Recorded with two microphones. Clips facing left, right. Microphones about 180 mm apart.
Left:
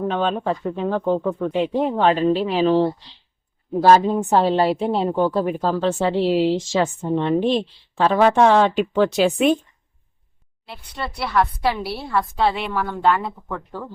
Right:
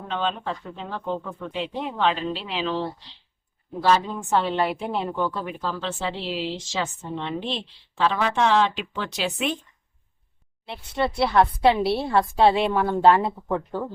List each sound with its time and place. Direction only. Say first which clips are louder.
0.1 s a woman's voice: left 6 dB; 50° left (ahead or behind)
10.7 s a woman's voice: right 5 dB; 25° right (ahead or behind)